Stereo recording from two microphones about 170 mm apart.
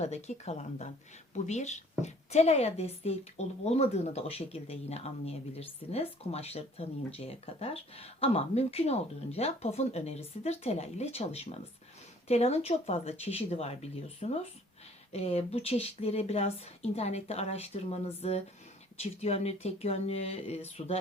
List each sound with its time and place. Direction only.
0.0 s a woman's voice: 40° left (ahead or behind)